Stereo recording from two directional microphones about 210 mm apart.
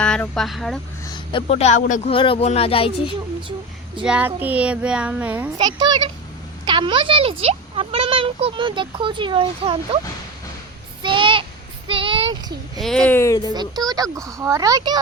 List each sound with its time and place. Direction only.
0.0 s a child's voice: 5° left (ahead or behind)
1.0 s speech: 20° left (ahead or behind)
2.1 s speech: 25° left (ahead or behind)
4.0 s a child's voice: 5° right (ahead or behind)
5.5 s speech: 20° right (ahead or behind)
11.0 s a sound: 25° right (ahead or behind)
11.9 s child singing: 25° right (ahead or behind)
12.3 s a child's voice: 20° right (ahead or behind)
12.8 s speech: 5° left (ahead or behind)
13.5 s speech: 20° right (ahead or behind)